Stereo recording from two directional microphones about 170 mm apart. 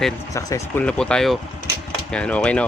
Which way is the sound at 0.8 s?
5° left (ahead or behind).